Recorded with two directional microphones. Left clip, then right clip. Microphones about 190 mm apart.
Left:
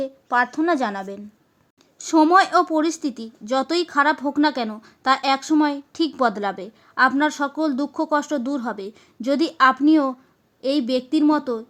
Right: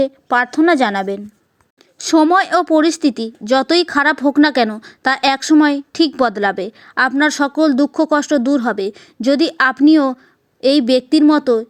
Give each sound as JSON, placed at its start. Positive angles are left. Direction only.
{"t": 0.0, "sound": "a woman's voice", "side_deg": -30}